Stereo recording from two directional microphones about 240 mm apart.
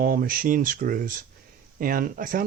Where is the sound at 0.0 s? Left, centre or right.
Right.